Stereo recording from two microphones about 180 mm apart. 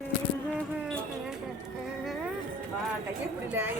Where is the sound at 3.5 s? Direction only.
10° right (ahead or behind).